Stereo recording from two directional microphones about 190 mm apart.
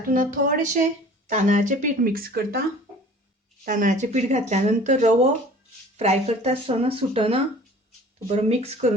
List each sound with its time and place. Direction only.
0.1 s speech: 45° right (ahead or behind)
3.7 s speech: 45° right (ahead or behind)